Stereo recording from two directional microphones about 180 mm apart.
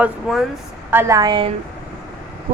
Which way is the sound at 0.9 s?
15° right (ahead or behind).